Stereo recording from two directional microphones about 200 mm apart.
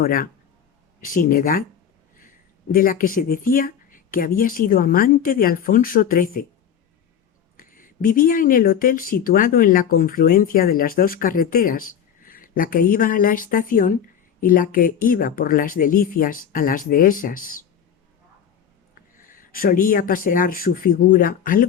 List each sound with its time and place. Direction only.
0.0 s speech: 45° left (ahead or behind)
2.7 s speech: 45° left (ahead or behind)
7.5 s speech: 45° left (ahead or behind)
19.3 s speech: 45° left (ahead or behind)